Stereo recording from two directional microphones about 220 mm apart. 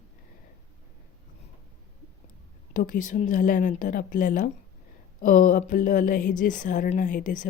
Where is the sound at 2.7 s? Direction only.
35° left (ahead or behind).